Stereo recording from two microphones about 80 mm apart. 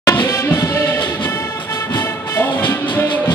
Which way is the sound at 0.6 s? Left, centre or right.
Left.